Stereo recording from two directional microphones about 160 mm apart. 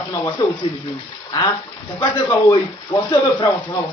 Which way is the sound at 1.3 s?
25° left (ahead or behind).